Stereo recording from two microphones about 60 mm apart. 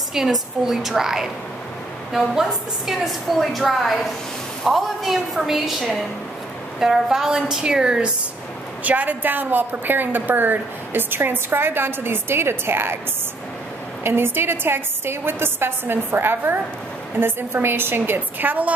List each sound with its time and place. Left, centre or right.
0.1 s a woman's voice: centre
2.9 s a woman's voice: centre
8.8 s a woman's voice: right
14.0 s a woman's voice: right